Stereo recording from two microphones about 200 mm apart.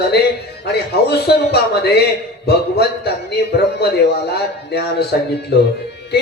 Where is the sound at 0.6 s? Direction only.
55° left (ahead or behind).